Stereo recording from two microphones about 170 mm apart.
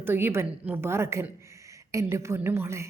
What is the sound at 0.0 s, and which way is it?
A woman's voice, 15° right (ahead or behind).